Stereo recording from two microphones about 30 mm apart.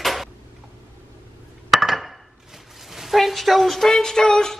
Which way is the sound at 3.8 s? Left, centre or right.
Centre.